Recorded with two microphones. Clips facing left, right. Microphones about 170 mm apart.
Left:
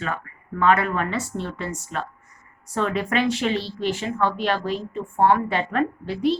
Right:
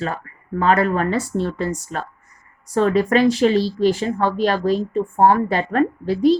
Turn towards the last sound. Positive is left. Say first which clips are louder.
# right 7 dB
turn(degrees=-40)  # may be behind; listen again after turning